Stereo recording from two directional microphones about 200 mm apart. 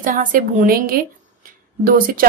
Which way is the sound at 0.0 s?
40° right (ahead or behind).